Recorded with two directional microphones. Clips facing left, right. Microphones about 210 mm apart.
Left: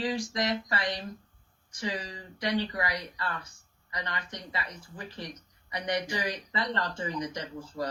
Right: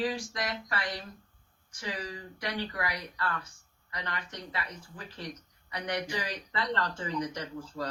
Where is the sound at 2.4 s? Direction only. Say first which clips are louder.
Left 5 dB; 15° left (ahead or behind).